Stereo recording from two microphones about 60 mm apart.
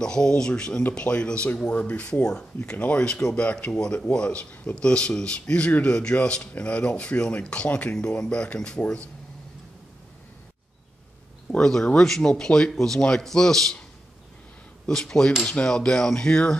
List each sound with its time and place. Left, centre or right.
0.0 s speech: centre
11.5 s speech: centre
14.9 s speech: centre